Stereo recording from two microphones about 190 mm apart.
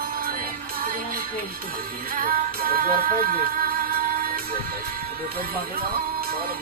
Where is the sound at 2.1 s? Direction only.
50° right (ahead or behind).